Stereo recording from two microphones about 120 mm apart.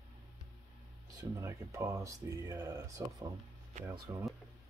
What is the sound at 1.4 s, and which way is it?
Speech, 20° right (ahead or behind).